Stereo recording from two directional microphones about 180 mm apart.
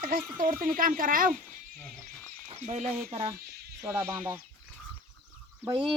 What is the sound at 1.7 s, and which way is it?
Horse, 5° left (ahead or behind).